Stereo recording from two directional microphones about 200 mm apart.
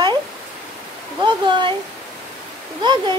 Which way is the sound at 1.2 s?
25° right (ahead or behind).